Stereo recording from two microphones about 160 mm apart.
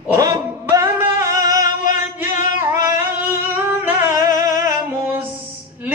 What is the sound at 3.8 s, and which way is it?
Singing, 15° right (ahead or behind).